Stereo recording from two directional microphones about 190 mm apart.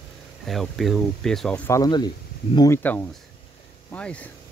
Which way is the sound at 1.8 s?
20° left (ahead or behind).